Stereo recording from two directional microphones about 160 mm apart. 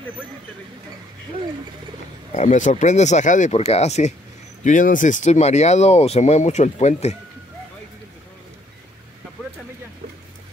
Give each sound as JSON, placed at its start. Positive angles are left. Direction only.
{"t": 2.3, "sound": "speech", "side_deg": 50}
{"t": 4.6, "sound": "speech", "side_deg": 55}